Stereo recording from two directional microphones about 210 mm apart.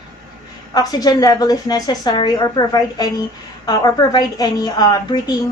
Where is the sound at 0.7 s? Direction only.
20° left (ahead or behind).